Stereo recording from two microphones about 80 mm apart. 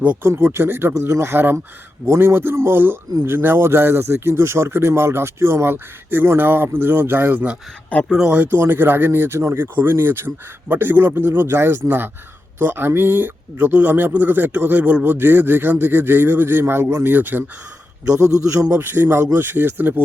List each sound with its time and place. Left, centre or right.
0.2 s speech: right
18.2 s a man's voice: right
18.7 s speech: right